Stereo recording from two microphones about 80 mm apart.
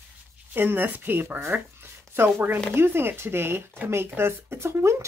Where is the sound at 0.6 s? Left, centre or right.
Right.